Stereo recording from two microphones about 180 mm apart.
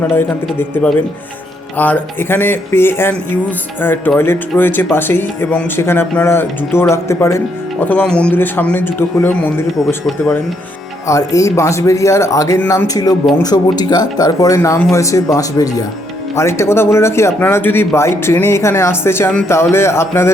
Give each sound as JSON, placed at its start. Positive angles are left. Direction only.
{"t": 1.8, "sound": "speech", "side_deg": 10}
{"t": 9.8, "sound": "speech", "side_deg": 0}
{"t": 11.1, "sound": "speech", "side_deg": 15}